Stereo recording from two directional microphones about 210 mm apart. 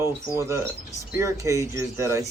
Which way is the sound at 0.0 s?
15° right (ahead or behind).